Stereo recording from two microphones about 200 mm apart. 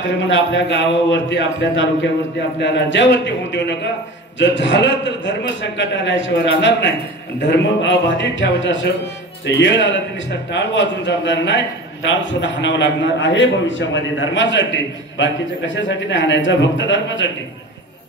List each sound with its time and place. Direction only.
0.2 s a man's voice: 70° left (ahead or behind)